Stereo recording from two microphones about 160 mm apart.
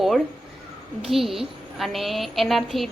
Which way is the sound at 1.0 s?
Centre (ahead or behind).